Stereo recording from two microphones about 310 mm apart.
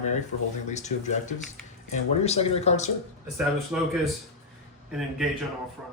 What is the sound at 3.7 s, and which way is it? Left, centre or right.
Speech, centre.